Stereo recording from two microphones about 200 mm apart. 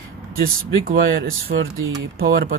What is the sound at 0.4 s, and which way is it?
Speech, 45° right (ahead or behind).